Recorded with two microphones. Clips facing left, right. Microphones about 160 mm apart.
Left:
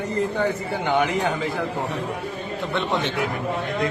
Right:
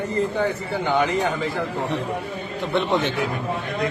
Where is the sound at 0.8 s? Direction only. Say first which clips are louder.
Even; 15° left (ahead or behind).